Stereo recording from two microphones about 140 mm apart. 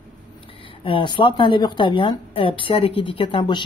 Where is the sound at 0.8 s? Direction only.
35° left (ahead or behind).